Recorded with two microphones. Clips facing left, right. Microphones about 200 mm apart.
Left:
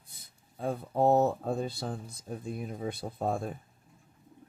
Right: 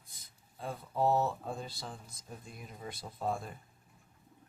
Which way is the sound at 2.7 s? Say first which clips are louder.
Left 9 dB; 80° left.